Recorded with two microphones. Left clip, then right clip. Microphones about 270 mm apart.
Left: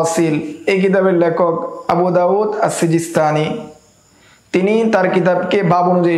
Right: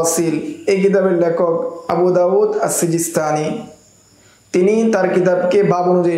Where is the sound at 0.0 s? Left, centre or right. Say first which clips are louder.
Left 2 dB; left.